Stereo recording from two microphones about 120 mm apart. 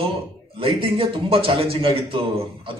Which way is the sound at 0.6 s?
50° right (ahead or behind).